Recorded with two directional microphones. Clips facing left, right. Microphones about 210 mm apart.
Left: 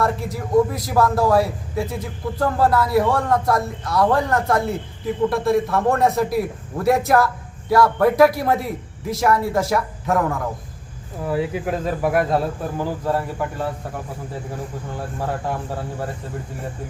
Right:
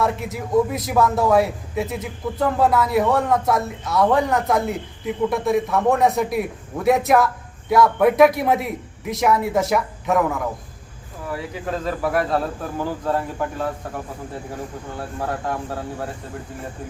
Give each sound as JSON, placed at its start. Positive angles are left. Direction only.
{"t": 0.0, "sound": "a man's voice", "side_deg": 0}
{"t": 11.3, "sound": "speech", "side_deg": 20}